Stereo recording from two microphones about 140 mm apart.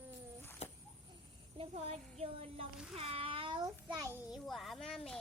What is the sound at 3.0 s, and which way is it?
Child singing, 45° right (ahead or behind).